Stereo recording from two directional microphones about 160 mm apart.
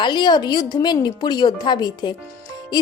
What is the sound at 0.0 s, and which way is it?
A woman's voice, 30° left (ahead or behind).